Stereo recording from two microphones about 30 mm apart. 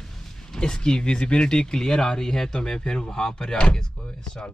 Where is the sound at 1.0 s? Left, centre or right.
Left.